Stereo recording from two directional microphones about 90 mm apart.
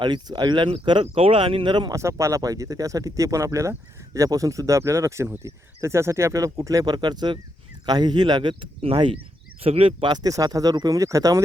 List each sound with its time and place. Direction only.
0.0 s speech: 55° right (ahead or behind)
1.9 s speech: 35° right (ahead or behind); by 10.1 s 85° right
10.1 s speech: 45° right (ahead or behind)